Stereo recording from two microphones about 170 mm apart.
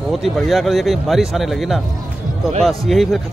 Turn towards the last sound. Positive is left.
turn(degrees=0)  # may be behind; listen again after turning